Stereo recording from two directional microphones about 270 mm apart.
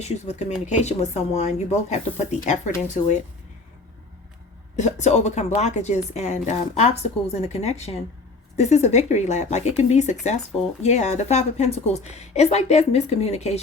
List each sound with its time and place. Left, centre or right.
0.0 s speech: left
4.8 s speech: left